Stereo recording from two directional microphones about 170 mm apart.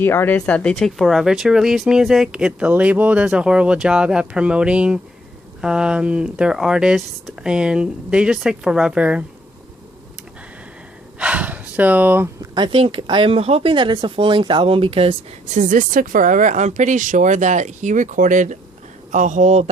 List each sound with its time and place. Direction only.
0.0 s speech: 15° left (ahead or behind); by 9.2 s 5° right (ahead or behind)
11.2 s a sound: 5° right (ahead or behind)
12.5 s speech: 30° right (ahead or behind)